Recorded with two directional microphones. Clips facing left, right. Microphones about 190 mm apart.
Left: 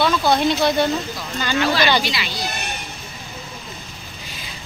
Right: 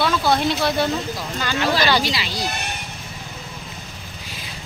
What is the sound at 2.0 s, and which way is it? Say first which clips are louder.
Speech: right 1 dB; 35° right (ahead or behind).